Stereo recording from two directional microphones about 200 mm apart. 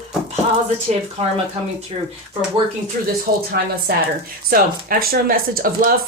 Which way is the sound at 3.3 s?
50° right (ahead or behind).